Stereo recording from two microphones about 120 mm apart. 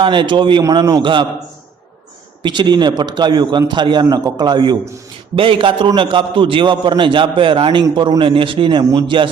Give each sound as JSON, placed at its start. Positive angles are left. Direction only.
{"t": 0.0, "sound": "a man's voice", "side_deg": -40}
{"t": 0.6, "sound": "a man's voice", "side_deg": -30}
{"t": 2.4, "sound": "a man's voice", "side_deg": -40}